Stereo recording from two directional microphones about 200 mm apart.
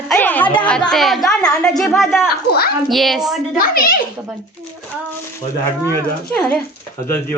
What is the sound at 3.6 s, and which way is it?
Speech, 45° left (ahead or behind).